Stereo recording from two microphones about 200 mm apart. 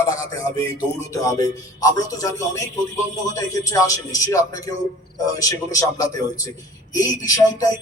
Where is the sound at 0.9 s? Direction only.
15° left (ahead or behind).